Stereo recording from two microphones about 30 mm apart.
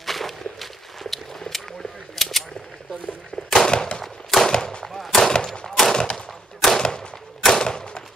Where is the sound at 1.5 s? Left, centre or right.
Left.